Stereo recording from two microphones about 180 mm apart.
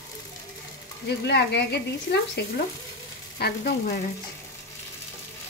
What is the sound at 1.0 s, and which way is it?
Speech, 70° left (ahead or behind).